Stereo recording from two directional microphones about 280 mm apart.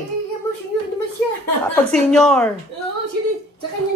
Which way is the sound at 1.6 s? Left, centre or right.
Centre.